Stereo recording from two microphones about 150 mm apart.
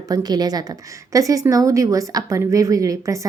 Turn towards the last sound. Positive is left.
turn(degrees=-20)  # may be behind; listen again after turning